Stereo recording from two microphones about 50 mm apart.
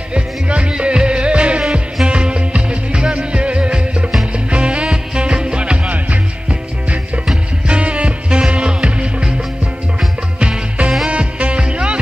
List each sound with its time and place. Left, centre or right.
0.1 s music: right
1.6 s music: centre
2.0 s music: centre
7.6 s music: right
10.4 s music: centre